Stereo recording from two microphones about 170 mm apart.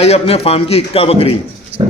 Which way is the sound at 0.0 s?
40° left (ahead or behind).